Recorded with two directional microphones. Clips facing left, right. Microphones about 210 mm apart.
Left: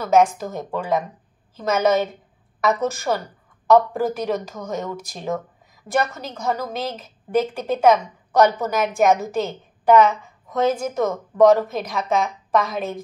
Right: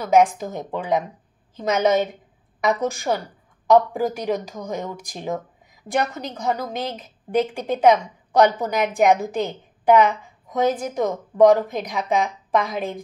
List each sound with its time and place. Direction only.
0.0 s a woman's voice: 15° right (ahead or behind)